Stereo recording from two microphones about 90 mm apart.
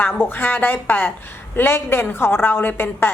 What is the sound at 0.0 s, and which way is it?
A woman's voice, 20° left (ahead or behind).